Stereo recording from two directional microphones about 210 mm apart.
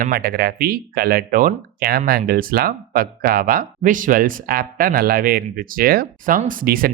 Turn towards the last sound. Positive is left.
turn(degrees=-40)  # may be behind; listen again after turning